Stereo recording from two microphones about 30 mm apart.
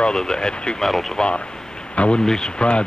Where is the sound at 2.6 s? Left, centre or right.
Left.